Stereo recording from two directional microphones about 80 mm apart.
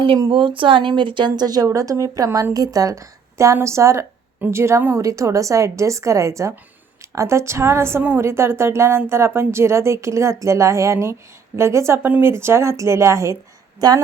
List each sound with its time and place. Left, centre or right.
0.3 s a woman's voice: right
13.7 s a woman's voice: right